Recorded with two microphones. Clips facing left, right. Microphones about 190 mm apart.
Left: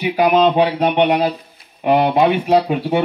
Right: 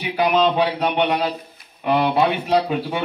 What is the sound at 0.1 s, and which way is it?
Speech, 45° left (ahead or behind).